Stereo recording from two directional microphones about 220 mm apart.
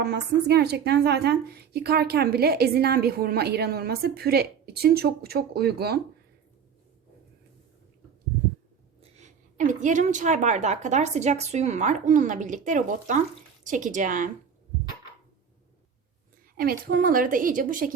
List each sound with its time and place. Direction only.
0.0 s a woman's voice: 50° right (ahead or behind)
9.0 s a woman's voice: 30° right (ahead or behind)
16.6 s a woman's voice: 40° right (ahead or behind)